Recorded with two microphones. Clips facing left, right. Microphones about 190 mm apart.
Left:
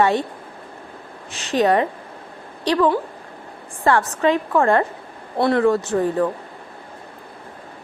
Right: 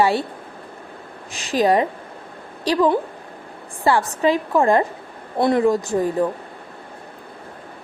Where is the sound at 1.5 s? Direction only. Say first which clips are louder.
Even; 10° right (ahead or behind).